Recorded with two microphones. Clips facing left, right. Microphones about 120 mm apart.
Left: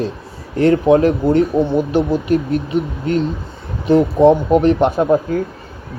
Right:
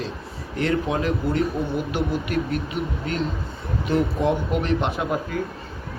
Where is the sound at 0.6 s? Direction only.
30° left (ahead or behind).